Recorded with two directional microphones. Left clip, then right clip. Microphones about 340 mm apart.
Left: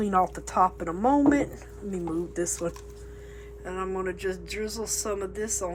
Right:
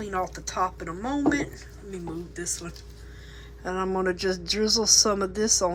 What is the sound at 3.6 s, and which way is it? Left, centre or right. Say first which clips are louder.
A man's voice: right 4 dB; centre.